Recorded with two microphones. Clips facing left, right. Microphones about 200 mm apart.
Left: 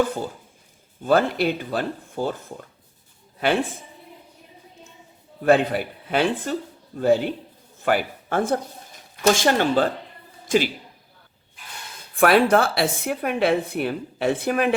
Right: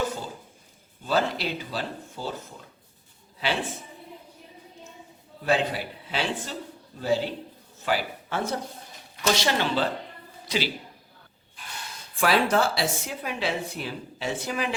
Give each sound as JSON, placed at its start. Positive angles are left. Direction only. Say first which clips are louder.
{"t": 1.0, "sound": "speech", "louder": "left 7 dB", "side_deg": 55}
{"t": 3.4, "sound": "speech", "louder": "left 7 dB", "side_deg": 50}
{"t": 5.4, "sound": "a woman's voice", "louder": "left 7 dB", "side_deg": 55}
{"t": 12.1, "sound": "a woman's voice", "louder": "left 6 dB", "side_deg": 55}